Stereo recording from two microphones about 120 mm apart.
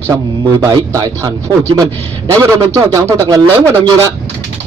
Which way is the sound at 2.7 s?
30° right (ahead or behind).